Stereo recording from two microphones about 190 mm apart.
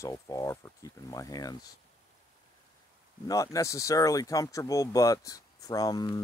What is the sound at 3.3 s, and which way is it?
Speech, 15° left (ahead or behind).